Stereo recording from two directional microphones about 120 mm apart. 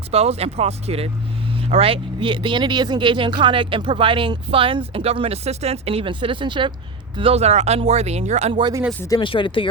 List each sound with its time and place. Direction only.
0.1 s speech: 60° right (ahead or behind); by 6.7 s 40° right (ahead or behind)
7.2 s speech: 55° right (ahead or behind)
9.1 s speech: 45° left (ahead or behind)